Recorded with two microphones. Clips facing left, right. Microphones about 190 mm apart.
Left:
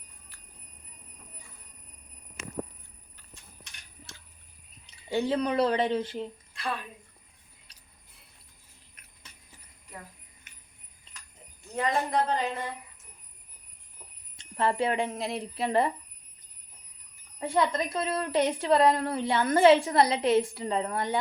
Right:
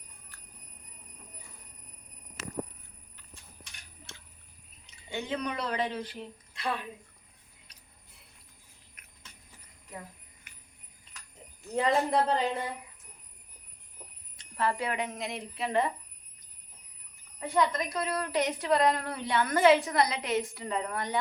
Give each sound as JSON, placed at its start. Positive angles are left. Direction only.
{"t": 5.1, "sound": "speech", "side_deg": 35}
{"t": 6.5, "sound": "a sound", "side_deg": -20}
{"t": 9.0, "sound": "a sound", "side_deg": 35}
{"t": 11.8, "sound": "speech", "side_deg": -30}
{"t": 14.3, "sound": "a woman's voice", "side_deg": 25}
{"t": 17.4, "sound": "a woman's voice", "side_deg": 30}